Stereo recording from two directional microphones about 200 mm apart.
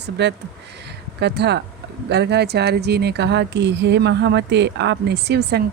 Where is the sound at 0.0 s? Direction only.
60° right (ahead or behind).